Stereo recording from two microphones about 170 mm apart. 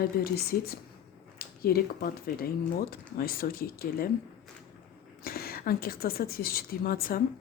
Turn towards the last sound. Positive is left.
turn(degrees=60)  # may be behind; listen again after turning